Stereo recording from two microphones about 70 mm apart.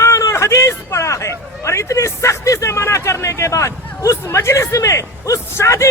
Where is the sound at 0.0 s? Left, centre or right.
Left.